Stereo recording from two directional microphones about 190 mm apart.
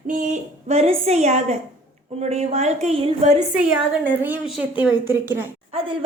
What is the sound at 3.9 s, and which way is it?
A woman's voice, 10° right (ahead or behind).